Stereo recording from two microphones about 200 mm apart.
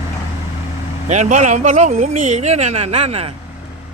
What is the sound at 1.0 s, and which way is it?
Speech, 35° right (ahead or behind).